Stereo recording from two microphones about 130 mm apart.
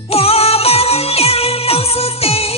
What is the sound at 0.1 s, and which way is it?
Music, 50° left (ahead or behind).